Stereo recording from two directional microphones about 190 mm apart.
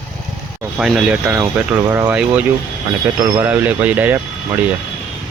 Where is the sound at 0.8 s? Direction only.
5° right (ahead or behind).